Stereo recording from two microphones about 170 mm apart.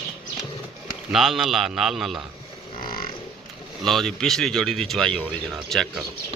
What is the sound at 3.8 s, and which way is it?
Speech, centre (ahead or behind).